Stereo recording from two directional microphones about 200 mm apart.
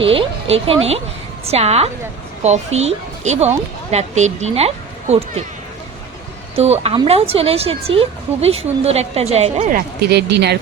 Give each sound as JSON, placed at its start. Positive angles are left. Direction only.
{"t": 0.0, "sound": "a woman's voice", "side_deg": -25}
{"t": 6.6, "sound": "speech", "side_deg": -30}
{"t": 10.1, "sound": "speech", "side_deg": -55}